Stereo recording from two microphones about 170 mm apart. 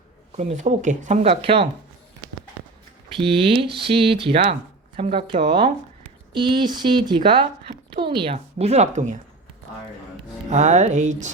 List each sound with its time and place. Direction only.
0.3 s speech: 45° right (ahead or behind)
3.2 s speech: 35° right (ahead or behind)
10.5 s speech: 45° right (ahead or behind)